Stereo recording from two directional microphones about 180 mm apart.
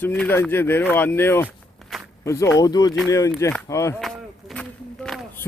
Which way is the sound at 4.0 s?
5° left (ahead or behind).